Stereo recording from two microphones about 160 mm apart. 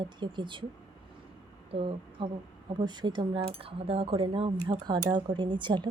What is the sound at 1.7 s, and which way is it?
Speech, 35° right (ahead or behind).